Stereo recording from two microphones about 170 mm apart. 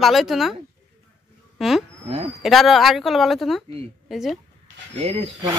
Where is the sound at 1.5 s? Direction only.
Centre (ahead or behind).